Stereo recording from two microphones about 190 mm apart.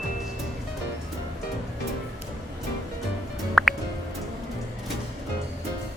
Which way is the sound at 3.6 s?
Centre (ahead or behind).